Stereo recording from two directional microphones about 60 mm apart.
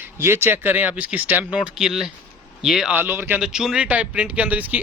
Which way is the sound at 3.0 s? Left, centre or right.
Right.